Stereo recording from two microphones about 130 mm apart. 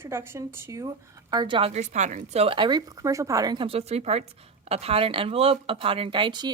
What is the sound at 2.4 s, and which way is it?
Speech, 40° right (ahead or behind).